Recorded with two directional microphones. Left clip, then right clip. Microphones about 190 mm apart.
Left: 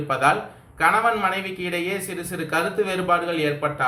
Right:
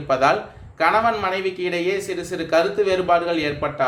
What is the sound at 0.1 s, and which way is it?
A man's voice, 45° right (ahead or behind).